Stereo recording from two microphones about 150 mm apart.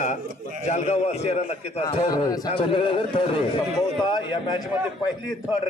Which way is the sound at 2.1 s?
25° left (ahead or behind).